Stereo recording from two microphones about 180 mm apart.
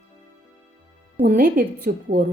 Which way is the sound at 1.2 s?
50° right (ahead or behind).